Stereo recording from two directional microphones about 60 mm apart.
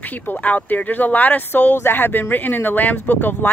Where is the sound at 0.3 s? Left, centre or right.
Left.